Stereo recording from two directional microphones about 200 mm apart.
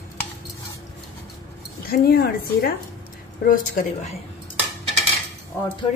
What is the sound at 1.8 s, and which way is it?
A woman's voice, 50° left (ahead or behind).